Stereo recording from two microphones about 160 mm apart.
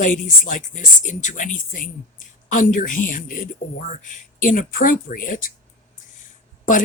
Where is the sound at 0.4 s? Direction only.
55° left (ahead or behind).